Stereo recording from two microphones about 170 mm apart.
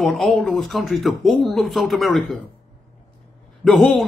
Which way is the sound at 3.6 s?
Centre (ahead or behind).